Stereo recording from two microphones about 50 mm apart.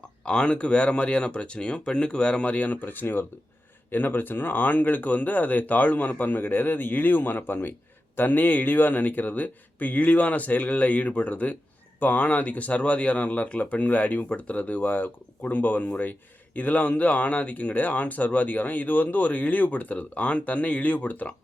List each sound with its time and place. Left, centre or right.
0.3 s speech: centre